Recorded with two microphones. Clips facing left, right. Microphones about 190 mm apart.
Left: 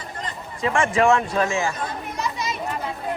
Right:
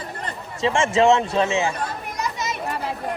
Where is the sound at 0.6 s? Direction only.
25° right (ahead or behind).